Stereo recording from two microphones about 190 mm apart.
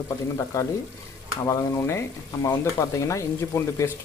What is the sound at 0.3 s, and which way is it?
Speech, 15° left (ahead or behind).